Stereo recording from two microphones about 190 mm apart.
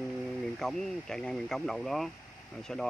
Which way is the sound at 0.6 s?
Centre (ahead or behind).